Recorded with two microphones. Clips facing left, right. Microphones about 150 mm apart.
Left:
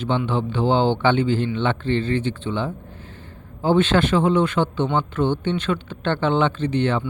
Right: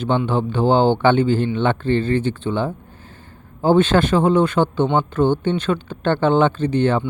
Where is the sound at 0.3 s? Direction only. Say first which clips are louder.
Right 3 dB; 45° right (ahead or behind).